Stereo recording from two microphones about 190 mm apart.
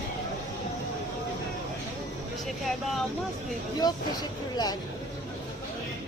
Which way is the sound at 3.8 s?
20° left (ahead or behind).